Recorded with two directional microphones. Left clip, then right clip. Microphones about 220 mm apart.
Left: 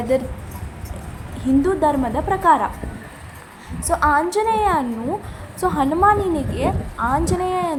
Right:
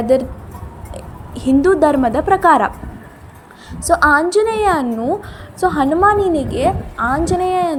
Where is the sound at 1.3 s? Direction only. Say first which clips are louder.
Right 6 dB; 25° right (ahead or behind).